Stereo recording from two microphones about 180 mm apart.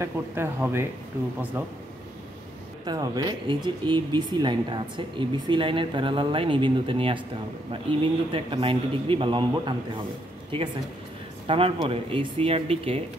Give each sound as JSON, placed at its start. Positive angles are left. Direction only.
{"t": 0.0, "sound": "speech", "side_deg": -15}
{"t": 2.8, "sound": "speech", "side_deg": -25}
{"t": 11.4, "sound": "speech", "side_deg": -30}